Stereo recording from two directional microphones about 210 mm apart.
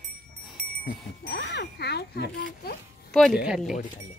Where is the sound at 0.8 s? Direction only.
50° left (ahead or behind).